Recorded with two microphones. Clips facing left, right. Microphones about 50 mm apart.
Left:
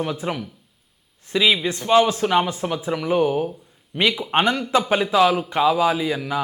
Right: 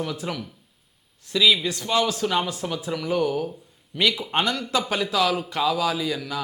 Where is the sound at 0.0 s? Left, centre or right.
Left.